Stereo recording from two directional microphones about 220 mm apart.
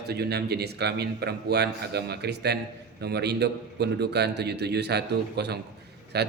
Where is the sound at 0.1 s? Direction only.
45° right (ahead or behind).